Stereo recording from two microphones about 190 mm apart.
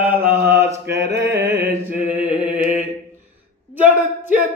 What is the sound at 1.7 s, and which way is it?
Mantra, 10° right (ahead or behind).